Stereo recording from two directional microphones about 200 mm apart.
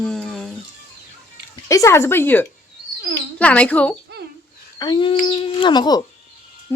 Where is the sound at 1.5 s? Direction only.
15° left (ahead or behind).